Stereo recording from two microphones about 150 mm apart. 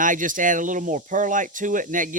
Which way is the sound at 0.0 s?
60° right (ahead or behind).